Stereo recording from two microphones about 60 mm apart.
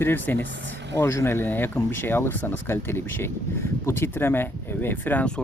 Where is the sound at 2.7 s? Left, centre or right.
Left.